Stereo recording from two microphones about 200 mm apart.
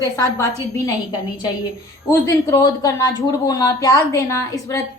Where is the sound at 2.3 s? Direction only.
15° left (ahead or behind).